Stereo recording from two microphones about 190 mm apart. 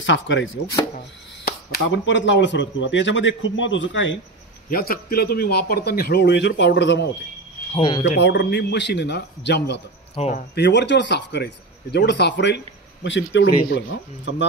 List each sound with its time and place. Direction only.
0.0 s speech: 75° left (ahead or behind)
0.9 s speech: 50° left (ahead or behind); by 4.2 s 75° left (ahead or behind)
4.6 s speech: 50° left (ahead or behind); by 7.1 s 65° left (ahead or behind)
7.7 s speech: 25° left (ahead or behind)
8.2 s speech: 60° left (ahead or behind)
10.1 s speech: 35° left (ahead or behind)
10.5 s speech: 65° left (ahead or behind)